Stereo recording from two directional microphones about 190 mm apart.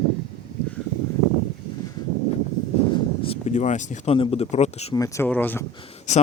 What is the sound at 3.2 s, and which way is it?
Speech, 35° left (ahead or behind).